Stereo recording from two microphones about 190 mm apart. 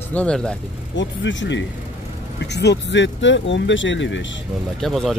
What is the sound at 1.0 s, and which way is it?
Speech, 75° left (ahead or behind).